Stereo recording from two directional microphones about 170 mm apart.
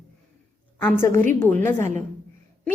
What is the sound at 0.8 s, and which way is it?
A woman's voice, 15° left (ahead or behind).